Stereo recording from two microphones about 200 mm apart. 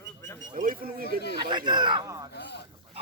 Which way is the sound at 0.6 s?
45° right (ahead or behind).